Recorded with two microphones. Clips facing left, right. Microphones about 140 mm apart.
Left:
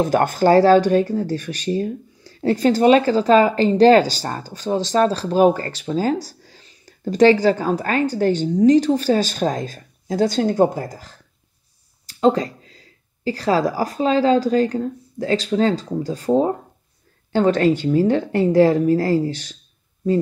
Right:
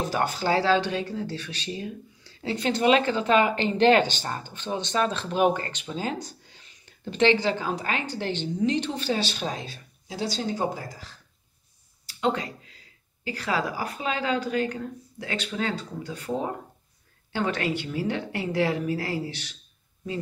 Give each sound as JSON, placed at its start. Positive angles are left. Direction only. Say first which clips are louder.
{"t": 0.0, "sound": "a woman's voice", "louder": "left 10 dB", "side_deg": 50}